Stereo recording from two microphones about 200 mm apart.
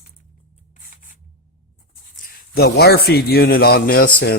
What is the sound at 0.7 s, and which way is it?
Scissors, 40° left (ahead or behind).